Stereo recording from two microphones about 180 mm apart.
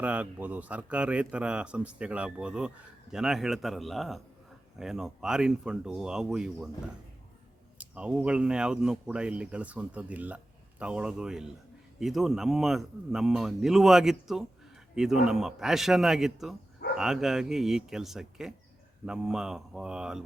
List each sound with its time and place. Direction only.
0.0 s speech: 10° right (ahead or behind)
7.8 s a man's voice: 5° right (ahead or behind)